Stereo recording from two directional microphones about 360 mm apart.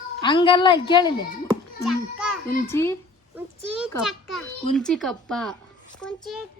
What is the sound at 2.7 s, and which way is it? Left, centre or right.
A child's voice, centre.